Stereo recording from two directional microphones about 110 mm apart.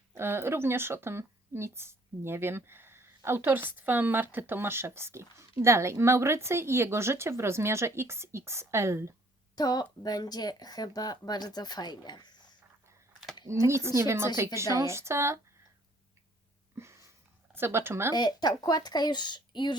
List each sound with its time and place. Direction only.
0.1 s speech: 20° right (ahead or behind)
9.6 s speech: 35° left (ahead or behind)
13.7 s speech: 25° right (ahead or behind)
16.7 s a sound: 25° right (ahead or behind)
17.5 s speech: 20° right (ahead or behind)
18.1 s speech: 40° left (ahead or behind)